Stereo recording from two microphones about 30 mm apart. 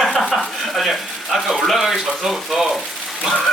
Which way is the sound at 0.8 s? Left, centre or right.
Centre.